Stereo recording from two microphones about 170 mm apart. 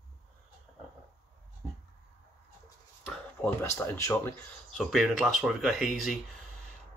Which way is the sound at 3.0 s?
10° left (ahead or behind).